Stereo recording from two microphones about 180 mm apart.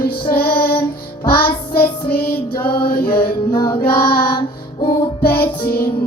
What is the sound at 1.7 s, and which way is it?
Music, 60° left (ahead or behind).